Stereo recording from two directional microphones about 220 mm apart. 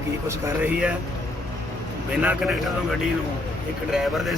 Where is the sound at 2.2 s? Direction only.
5° right (ahead or behind).